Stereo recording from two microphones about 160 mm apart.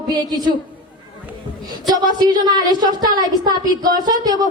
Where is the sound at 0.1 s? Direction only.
25° right (ahead or behind).